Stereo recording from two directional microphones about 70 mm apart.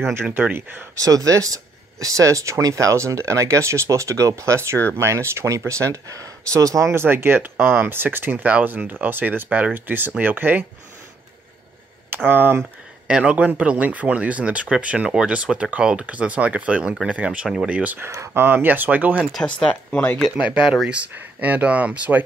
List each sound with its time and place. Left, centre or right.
0.0 s speech: right
0.9 s speech: right
6.9 s speech: right
12.3 s speech: right
13.0 s speech: centre
18.0 s speech: right
19.4 s speech: centre
20.6 s speech: centre
20.9 s speech: centre